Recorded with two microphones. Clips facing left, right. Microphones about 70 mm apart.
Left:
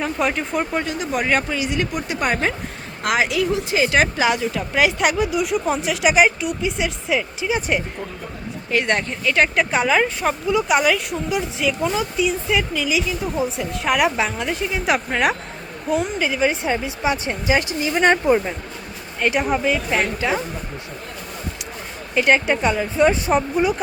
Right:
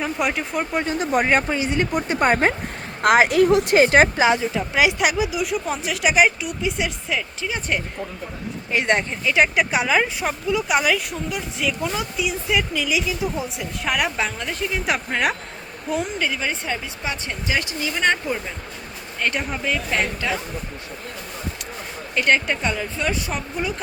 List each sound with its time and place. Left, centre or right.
0.0 s speech: centre
0.9 s a woman's voice: right
3.5 s a woman's voice: right
3.8 s speech: right
4.7 s speech: centre
8.7 s speech: centre
9.2 s speech: centre; by 18.5 s left
19.2 s speech: centre
22.1 s speech: centre